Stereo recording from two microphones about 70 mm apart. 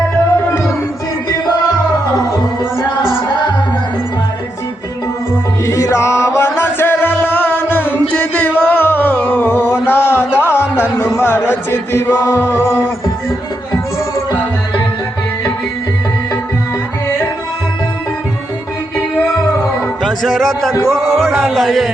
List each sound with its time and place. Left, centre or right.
5.6 s music: left
20.1 s music: centre
21.1 s speech: centre
21.4 s music: centre